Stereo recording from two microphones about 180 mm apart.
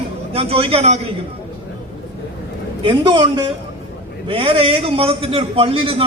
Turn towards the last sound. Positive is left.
turn(degrees=-30)  # may be behind; listen again after turning